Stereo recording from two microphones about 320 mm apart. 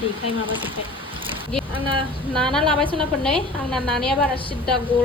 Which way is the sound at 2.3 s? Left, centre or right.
Centre.